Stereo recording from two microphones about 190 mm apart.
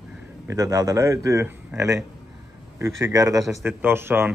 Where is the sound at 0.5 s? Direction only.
20° right (ahead or behind).